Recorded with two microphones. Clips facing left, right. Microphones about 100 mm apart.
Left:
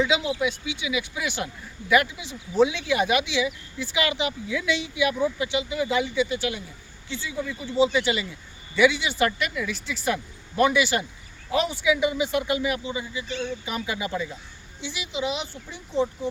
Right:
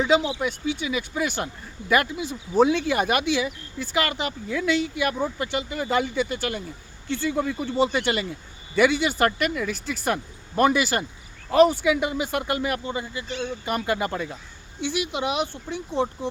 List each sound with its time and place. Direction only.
0.1 s speech: 45° right (ahead or behind)